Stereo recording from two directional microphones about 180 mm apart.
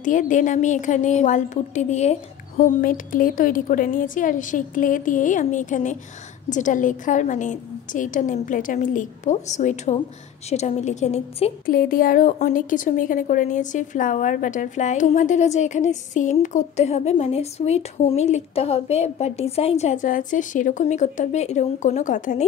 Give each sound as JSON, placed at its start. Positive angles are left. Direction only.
{"t": 0.0, "sound": "a woman's voice", "side_deg": 45}
{"t": 11.6, "sound": "a woman's voice", "side_deg": 55}